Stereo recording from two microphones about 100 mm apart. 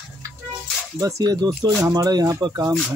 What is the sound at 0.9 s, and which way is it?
Speech, 40° right (ahead or behind).